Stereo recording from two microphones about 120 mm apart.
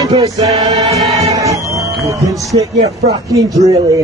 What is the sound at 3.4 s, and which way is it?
Choir, 30° right (ahead or behind).